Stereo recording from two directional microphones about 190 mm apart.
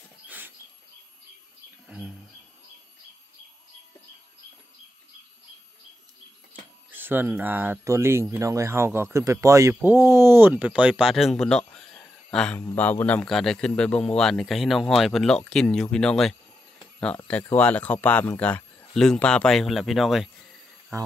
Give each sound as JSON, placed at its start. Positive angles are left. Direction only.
{"t": 1.9, "sound": "a sound", "side_deg": -5}
{"t": 6.9, "sound": "speech", "side_deg": -10}
{"t": 20.9, "sound": "speech", "side_deg": -15}